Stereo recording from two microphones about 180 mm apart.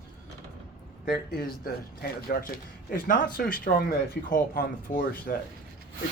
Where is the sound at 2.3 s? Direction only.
50° left (ahead or behind).